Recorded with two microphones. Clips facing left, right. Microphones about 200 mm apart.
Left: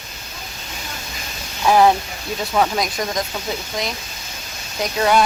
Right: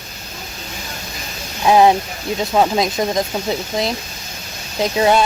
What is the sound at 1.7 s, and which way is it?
Speech, 20° right (ahead or behind).